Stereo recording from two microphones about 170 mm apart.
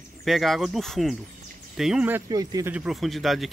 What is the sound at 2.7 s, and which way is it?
Speech, centre (ahead or behind).